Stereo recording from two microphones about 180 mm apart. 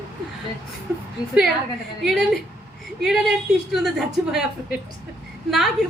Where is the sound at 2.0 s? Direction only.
Centre (ahead or behind).